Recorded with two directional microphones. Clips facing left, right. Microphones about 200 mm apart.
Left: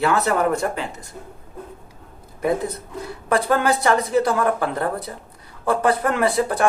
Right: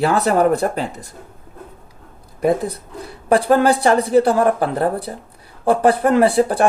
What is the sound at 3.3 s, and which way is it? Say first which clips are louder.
Speech: right 5 dB; 30° right (ahead or behind).